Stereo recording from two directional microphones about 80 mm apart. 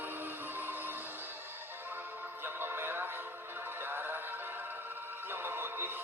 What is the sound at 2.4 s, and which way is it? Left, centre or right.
Music, right.